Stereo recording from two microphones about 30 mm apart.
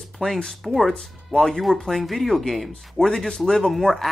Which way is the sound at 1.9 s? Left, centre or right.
Centre.